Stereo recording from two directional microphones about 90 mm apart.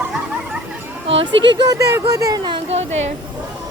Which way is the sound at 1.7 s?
40° right (ahead or behind).